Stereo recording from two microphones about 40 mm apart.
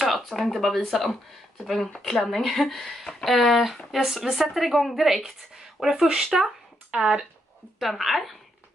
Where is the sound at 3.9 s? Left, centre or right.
Centre.